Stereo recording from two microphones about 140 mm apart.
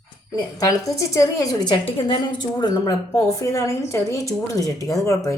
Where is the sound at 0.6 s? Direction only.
25° left (ahead or behind).